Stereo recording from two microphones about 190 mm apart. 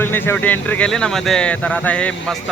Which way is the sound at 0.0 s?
10° left (ahead or behind).